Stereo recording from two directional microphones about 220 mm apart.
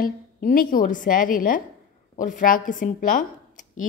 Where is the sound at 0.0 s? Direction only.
40° left (ahead or behind).